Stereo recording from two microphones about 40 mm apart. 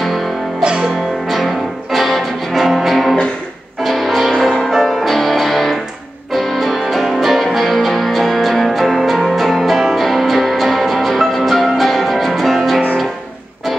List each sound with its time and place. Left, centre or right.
0.0 s music: centre
0.6 s music: right
1.2 s music: centre